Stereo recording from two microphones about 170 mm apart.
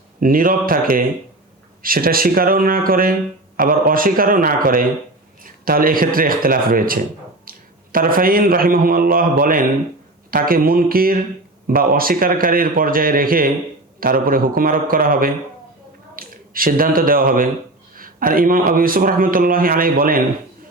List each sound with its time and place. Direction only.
0.2 s speech: 55° right (ahead or behind)
7.5 s a sound: 60° right (ahead or behind)
7.9 s speech: 55° right (ahead or behind)